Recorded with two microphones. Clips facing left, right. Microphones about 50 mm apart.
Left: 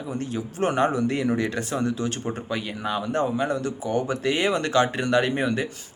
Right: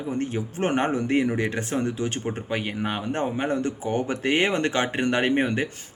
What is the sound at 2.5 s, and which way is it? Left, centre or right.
Speech, right.